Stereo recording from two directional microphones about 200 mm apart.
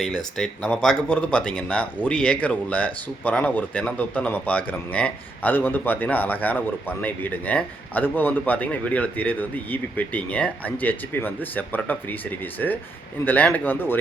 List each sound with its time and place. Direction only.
0.3 s speech: 5° left (ahead or behind)